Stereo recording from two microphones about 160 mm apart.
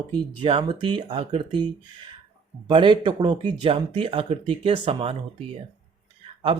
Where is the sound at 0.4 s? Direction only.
35° right (ahead or behind).